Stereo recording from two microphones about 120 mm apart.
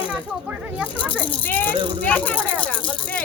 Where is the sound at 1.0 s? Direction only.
15° left (ahead or behind).